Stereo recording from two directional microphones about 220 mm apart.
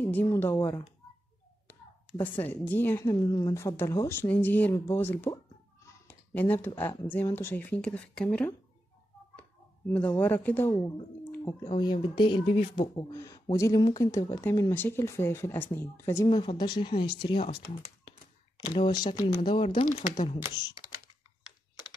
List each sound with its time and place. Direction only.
0.0 s speech: 10° left (ahead or behind)
6.0 s a sound: 10° left (ahead or behind)
7.1 s speech: 10° left (ahead or behind)
18.8 s speech: 25° left (ahead or behind)
19.8 s speech: 35° left (ahead or behind)